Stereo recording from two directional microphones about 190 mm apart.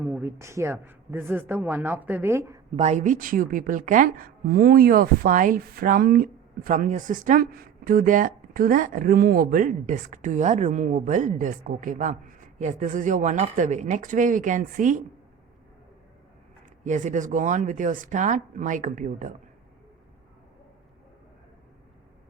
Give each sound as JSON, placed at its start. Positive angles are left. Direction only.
{"t": 0.0, "sound": "a man's voice", "side_deg": -10}
{"t": 2.7, "sound": "a woman's voice", "side_deg": -35}
{"t": 16.8, "sound": "a woman's voice", "side_deg": -40}